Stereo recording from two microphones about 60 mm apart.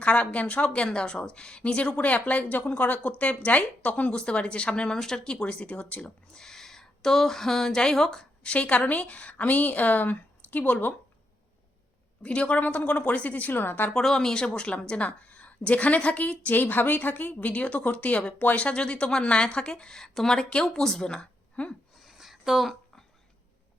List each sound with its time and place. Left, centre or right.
0.0 s a woman's voice: centre
6.4 s speech: centre
8.5 s a woman's voice: left
12.2 s a woman's voice: centre
13.9 s a woman's voice: centre
22.0 s a sound: centre